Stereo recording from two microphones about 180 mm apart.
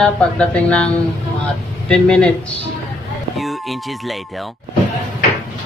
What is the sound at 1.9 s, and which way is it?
Speech, 5° left (ahead or behind).